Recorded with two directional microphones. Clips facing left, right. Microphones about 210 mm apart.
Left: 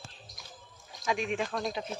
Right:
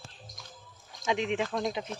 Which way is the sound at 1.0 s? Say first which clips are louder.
Right 2 dB; 20° right (ahead or behind).